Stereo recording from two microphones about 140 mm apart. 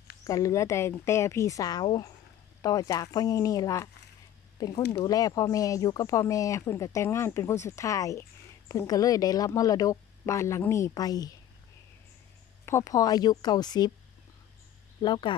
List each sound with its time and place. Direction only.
0.2 s speech: 25° left (ahead or behind)
12.6 s speech: 20° left (ahead or behind)
15.0 s speech: 35° left (ahead or behind)